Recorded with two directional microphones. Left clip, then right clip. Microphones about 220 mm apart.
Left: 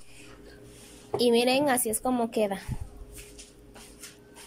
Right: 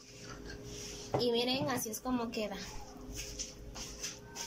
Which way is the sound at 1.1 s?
45° left (ahead or behind).